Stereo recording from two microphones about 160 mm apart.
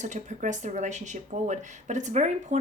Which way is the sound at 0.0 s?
50° right (ahead or behind).